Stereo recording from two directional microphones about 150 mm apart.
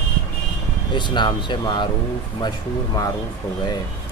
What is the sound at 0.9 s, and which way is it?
Speech, 30° left (ahead or behind).